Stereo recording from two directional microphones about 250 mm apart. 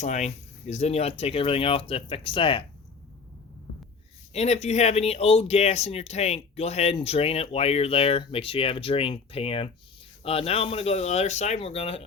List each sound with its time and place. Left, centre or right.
0.0 s speech: left
4.3 s speech: left